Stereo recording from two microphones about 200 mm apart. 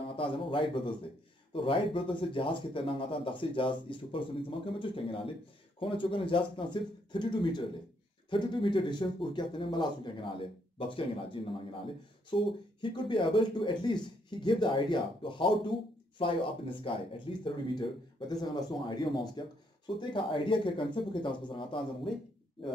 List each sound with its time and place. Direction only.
0.1 s speech: 25° left (ahead or behind)